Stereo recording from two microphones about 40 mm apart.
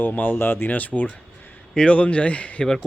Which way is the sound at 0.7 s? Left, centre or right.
Left.